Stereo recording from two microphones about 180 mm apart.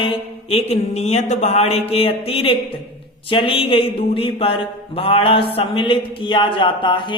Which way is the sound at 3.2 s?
30° left (ahead or behind).